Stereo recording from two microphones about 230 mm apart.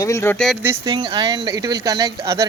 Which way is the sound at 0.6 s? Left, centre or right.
Centre.